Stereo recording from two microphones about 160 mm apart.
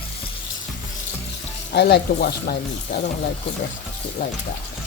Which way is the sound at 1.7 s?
90° left.